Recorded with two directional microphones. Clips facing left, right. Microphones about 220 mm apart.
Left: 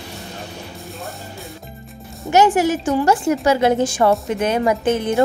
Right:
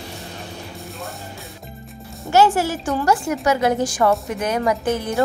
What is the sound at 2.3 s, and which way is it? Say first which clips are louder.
A woman's voice: left 2 dB; 15° left (ahead or behind).